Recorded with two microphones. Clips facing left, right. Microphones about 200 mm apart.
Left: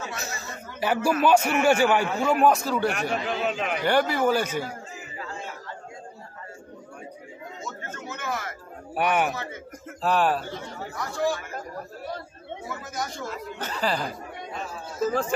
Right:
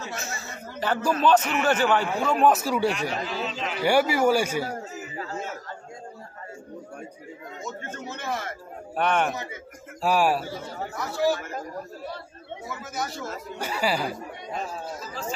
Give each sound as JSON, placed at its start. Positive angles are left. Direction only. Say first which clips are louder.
{"t": 0.1, "sound": "a sound", "louder": "even", "side_deg": 35}
{"t": 0.7, "sound": "a man's voice", "louder": "left 2 dB", "side_deg": 10}
{"t": 3.0, "sound": "a man's voice", "louder": "left 2 dB", "side_deg": 55}
{"t": 3.8, "sound": "a man's voice", "louder": "right 2 dB", "side_deg": -10}
{"t": 4.6, "sound": "a sound", "louder": "right 4 dB", "side_deg": -40}
{"t": 7.9, "sound": "a sound", "louder": "even", "side_deg": -30}
{"t": 8.9, "sound": "a man's voice", "louder": "even", "side_deg": 10}
{"t": 10.0, "sound": "a man's voice", "louder": "right 1 dB", "side_deg": -10}
{"t": 12.9, "sound": "a man's voice", "louder": "right 1 dB", "side_deg": -5}
{"t": 15.0, "sound": "speech", "louder": "left 9 dB", "side_deg": 50}